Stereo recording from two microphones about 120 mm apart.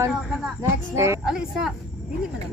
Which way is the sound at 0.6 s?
25° right (ahead or behind).